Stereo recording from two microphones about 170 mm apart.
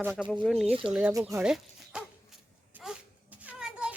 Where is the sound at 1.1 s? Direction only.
15° right (ahead or behind).